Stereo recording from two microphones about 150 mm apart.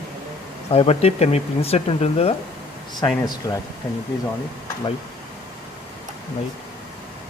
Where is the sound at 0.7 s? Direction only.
40° left (ahead or behind).